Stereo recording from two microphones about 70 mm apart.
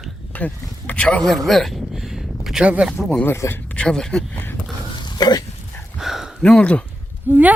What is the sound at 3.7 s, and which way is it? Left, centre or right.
Speech, centre.